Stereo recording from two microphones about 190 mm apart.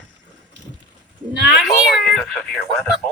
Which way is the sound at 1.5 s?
Centre (ahead or behind).